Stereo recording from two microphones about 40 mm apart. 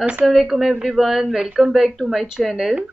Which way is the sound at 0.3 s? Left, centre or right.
Centre.